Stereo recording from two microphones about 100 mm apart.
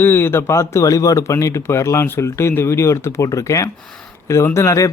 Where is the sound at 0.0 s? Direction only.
20° left (ahead or behind).